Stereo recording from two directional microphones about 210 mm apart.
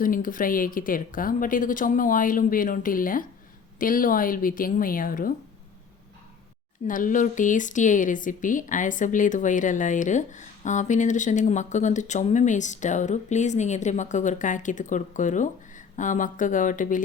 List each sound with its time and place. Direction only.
0.0 s speech: 40° left (ahead or behind)
6.8 s speech: 40° left (ahead or behind)